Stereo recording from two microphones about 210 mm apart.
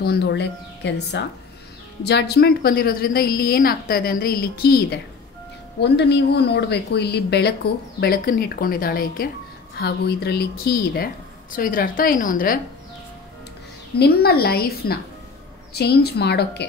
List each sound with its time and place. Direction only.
0.0 s a woman's voice: 50° left (ahead or behind)
13.9 s a woman's voice: 50° left (ahead or behind)